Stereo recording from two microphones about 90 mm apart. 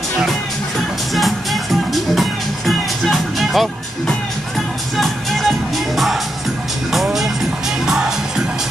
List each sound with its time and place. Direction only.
1.1 s music: centre (ahead or behind)
4.9 s music: centre (ahead or behind)
6.9 s music: centre (ahead or behind)